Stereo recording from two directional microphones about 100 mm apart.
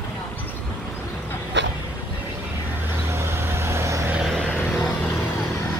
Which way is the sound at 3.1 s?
25° right (ahead or behind).